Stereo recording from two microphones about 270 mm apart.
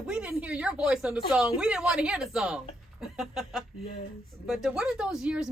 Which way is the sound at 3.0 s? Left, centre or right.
Centre.